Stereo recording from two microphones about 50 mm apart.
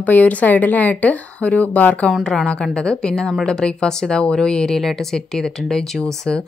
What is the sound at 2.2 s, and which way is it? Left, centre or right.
Speech, centre.